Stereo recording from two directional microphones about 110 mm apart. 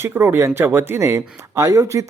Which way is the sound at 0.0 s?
20° right (ahead or behind).